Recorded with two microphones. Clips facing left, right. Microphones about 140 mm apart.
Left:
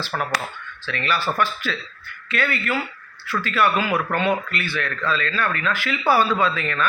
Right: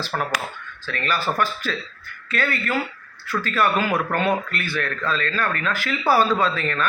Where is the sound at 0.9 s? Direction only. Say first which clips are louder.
Even; 45° right (ahead or behind).